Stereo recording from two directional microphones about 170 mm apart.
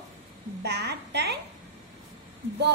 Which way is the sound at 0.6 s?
80° right.